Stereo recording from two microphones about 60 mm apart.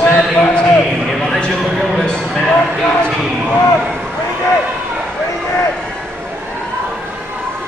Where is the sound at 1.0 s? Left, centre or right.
Centre.